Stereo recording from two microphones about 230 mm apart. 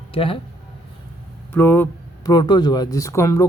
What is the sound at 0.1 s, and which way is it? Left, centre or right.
Speech, left.